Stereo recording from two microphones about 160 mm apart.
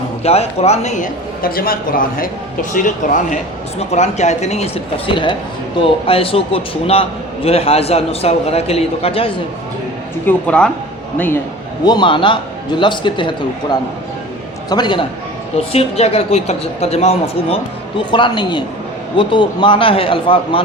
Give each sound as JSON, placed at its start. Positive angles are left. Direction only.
{"t": 0.2, "sound": "a man's voice", "side_deg": 40}
{"t": 10.2, "sound": "speech", "side_deg": 5}
{"t": 11.9, "sound": "a man's voice", "side_deg": 30}
{"t": 15.5, "sound": "a man's voice", "side_deg": 40}